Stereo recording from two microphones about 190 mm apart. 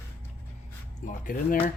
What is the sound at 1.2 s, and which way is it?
Speech, 45° left (ahead or behind).